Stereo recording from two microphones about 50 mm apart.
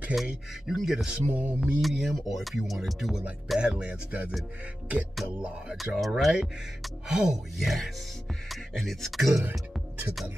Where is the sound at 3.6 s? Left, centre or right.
Centre.